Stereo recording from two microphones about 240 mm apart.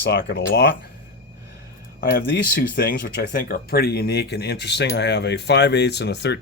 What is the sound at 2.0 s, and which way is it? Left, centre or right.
Speech, left.